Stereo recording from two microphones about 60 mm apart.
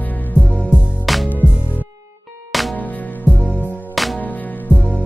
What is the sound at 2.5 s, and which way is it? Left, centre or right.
Music, centre.